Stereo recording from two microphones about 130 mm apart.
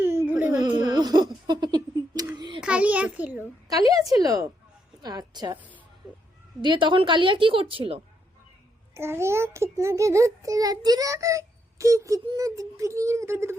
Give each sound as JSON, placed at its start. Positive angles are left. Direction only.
{"t": 0.0, "sound": "a sound", "side_deg": -20}
{"t": 0.5, "sound": "music", "side_deg": -30}
{"t": 1.5, "sound": "a sound", "side_deg": -35}
{"t": 2.6, "sound": "a child's voice", "side_deg": -10}
{"t": 3.7, "sound": "a child's voice", "side_deg": -25}
{"t": 6.6, "sound": "speech", "side_deg": -35}
{"t": 9.0, "sound": "a child's voice", "side_deg": -20}